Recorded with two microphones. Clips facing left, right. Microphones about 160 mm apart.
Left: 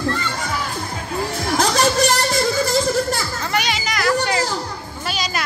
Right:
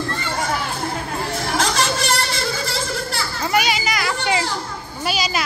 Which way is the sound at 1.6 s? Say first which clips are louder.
Left 6 dB; 40° left (ahead or behind).